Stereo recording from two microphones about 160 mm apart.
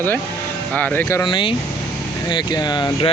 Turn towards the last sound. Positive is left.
turn(degrees=25)  # may be behind; listen again after turning